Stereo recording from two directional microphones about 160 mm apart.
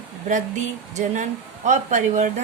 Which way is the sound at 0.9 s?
50° right (ahead or behind).